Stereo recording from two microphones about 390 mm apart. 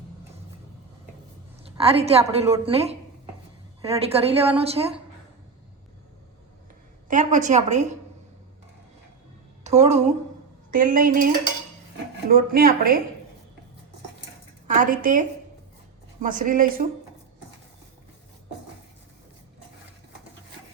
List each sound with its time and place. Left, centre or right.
2.0 s a woman's voice: centre
7.1 s a woman's voice: centre
9.6 s a woman's voice: centre
14.8 s a woman's voice: centre